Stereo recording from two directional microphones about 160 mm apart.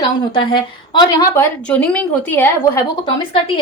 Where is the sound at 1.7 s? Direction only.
10° left (ahead or behind).